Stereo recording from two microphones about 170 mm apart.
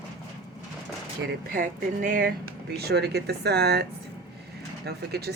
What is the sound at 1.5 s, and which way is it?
Speech, 55° right (ahead or behind).